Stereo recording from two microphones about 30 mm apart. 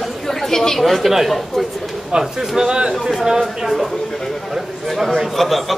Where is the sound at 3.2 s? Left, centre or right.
Centre.